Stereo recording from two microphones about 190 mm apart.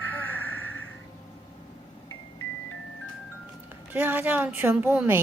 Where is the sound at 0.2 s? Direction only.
10° left (ahead or behind).